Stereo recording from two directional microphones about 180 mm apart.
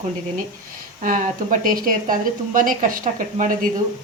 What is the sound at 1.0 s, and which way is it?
Speech, 45° right (ahead or behind).